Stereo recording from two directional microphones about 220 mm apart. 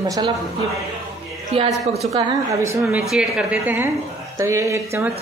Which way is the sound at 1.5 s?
25° right (ahead or behind).